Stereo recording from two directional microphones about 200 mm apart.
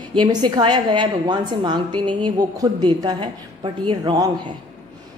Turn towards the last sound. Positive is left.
turn(degrees=-20)  # may be behind; listen again after turning